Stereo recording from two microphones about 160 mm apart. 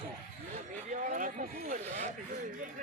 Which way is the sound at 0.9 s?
55° right (ahead or behind).